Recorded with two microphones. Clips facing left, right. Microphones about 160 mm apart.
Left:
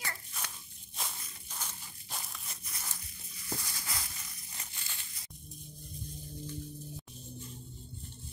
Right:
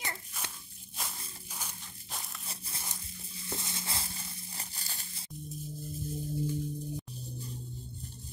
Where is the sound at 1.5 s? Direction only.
10° right (ahead or behind).